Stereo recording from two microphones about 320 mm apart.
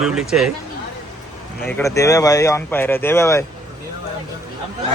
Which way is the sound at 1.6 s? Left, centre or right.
Centre.